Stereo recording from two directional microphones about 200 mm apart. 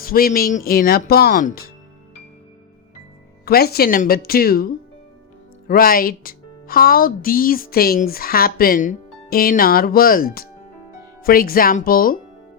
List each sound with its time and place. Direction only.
0.0 s speech: 45° left (ahead or behind)
3.4 s speech: 50° left (ahead or behind)